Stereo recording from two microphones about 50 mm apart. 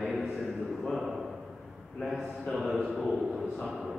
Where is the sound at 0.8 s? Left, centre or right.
Centre.